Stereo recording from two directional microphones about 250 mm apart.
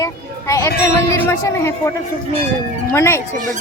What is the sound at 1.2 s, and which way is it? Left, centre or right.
Speech, centre.